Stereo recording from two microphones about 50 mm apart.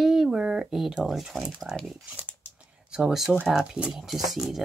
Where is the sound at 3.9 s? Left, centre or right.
Centre.